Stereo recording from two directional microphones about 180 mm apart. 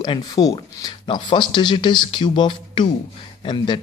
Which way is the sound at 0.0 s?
25° left (ahead or behind).